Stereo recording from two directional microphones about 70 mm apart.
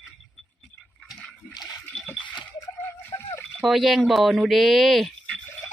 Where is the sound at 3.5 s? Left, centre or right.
Centre.